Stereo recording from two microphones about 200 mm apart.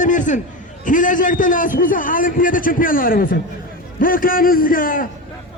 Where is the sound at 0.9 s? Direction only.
40° left (ahead or behind).